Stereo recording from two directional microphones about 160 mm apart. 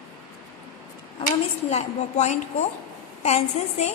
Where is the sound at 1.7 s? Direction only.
45° left (ahead or behind).